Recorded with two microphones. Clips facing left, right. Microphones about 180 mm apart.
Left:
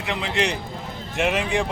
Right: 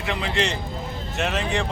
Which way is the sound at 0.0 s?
15° left (ahead or behind).